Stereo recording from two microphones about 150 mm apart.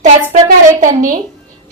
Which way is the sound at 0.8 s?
60° right (ahead or behind).